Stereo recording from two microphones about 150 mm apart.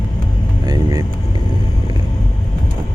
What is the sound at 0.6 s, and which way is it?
Vehicle, 25° right (ahead or behind).